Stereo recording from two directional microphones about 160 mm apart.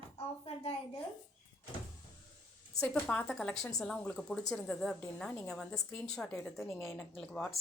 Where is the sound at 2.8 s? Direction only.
10° left (ahead or behind).